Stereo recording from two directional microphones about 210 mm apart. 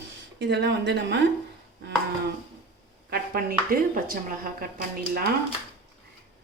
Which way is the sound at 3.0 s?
45° right (ahead or behind).